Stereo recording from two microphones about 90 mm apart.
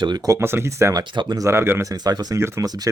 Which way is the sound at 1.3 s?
30° right (ahead or behind).